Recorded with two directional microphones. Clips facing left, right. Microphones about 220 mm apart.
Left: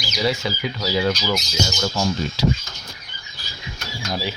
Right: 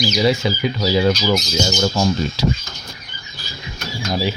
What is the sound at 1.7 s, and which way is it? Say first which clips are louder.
Speech: right 6 dB; 35° right (ahead or behind).